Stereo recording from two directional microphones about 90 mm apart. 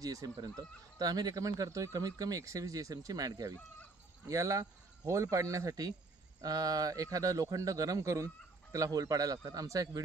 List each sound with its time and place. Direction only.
0.0 s speech: 45° right (ahead or behind)